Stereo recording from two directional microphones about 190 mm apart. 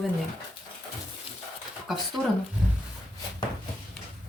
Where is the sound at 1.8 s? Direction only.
Centre (ahead or behind).